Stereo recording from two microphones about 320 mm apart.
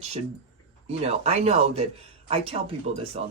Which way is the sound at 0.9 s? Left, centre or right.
Centre.